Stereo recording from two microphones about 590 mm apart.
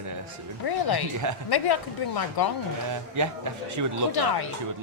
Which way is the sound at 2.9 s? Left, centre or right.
Right.